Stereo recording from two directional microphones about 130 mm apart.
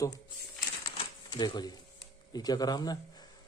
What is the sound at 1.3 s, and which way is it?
A man's voice, 35° left (ahead or behind).